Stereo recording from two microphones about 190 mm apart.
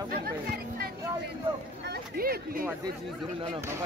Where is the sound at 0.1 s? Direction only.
50° right (ahead or behind).